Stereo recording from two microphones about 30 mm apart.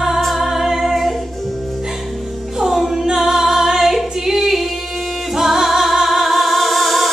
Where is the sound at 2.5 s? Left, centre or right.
Centre.